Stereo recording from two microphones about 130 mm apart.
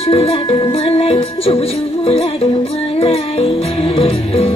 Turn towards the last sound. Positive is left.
turn(degrees=45)  # may be behind; listen again after turning